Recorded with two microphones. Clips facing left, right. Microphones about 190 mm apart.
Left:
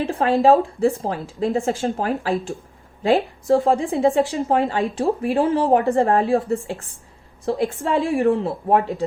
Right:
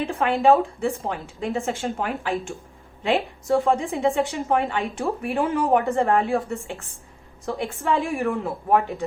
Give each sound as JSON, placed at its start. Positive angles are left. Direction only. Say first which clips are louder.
{"t": 0.0, "sound": "a woman's voice", "louder": "left 3 dB", "side_deg": 35}